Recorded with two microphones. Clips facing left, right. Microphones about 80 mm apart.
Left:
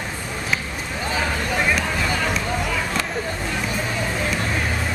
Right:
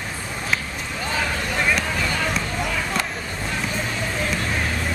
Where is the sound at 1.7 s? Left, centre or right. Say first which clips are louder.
Left 1 dB; centre.